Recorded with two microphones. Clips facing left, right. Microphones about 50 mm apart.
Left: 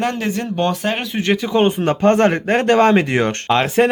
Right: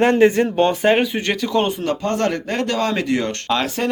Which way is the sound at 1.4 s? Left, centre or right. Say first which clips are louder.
Left 3 dB; left.